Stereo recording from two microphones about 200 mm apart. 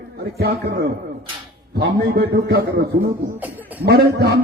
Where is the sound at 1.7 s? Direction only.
55° right (ahead or behind).